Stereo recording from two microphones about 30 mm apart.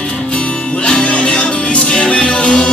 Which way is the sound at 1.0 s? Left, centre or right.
Left.